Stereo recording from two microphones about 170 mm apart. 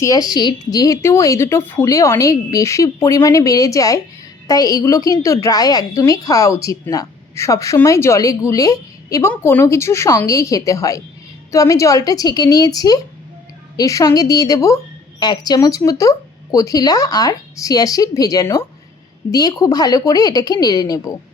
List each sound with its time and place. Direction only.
0.0 s a woman's voice: 20° left (ahead or behind)